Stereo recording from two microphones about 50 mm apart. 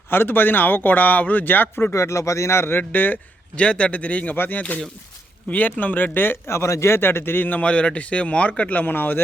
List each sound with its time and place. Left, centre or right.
0.1 s a man's voice: left
1.9 s speech: left
3.6 s a man's voice: left
4.4 s a man's voice: left
6.5 s a man's voice: left
8.8 s a man's voice: left